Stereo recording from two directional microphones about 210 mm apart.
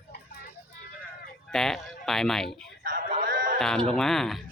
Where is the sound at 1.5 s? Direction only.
Centre (ahead or behind).